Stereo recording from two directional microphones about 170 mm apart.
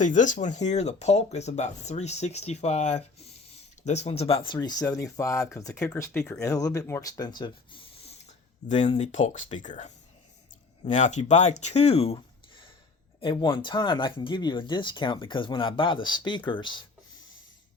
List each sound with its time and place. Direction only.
0.0 s speech: 45° left (ahead or behind); by 8.1 s 30° left (ahead or behind)
8.6 s speech: 40° left (ahead or behind)
11.6 s a sound: 40° left (ahead or behind)
13.1 s speech: 30° left (ahead or behind)